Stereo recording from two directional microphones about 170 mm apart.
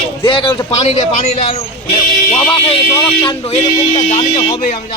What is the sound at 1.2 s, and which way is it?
Speech, 45° left (ahead or behind).